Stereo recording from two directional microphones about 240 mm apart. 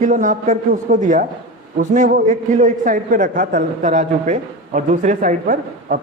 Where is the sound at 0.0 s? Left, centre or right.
Right.